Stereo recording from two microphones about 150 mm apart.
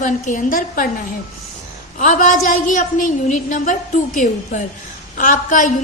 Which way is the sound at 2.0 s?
55° left (ahead or behind).